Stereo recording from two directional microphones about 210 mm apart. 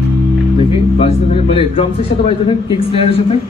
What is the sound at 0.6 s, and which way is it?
Speech, 30° left (ahead or behind).